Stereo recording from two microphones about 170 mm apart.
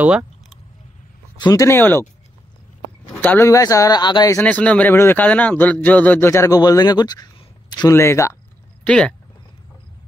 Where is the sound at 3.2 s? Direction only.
15° left (ahead or behind).